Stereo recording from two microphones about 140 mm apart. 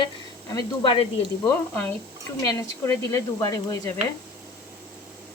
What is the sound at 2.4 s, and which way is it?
Speech, 20° left (ahead or behind).